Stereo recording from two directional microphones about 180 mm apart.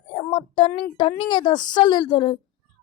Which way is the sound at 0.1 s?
30° left (ahead or behind).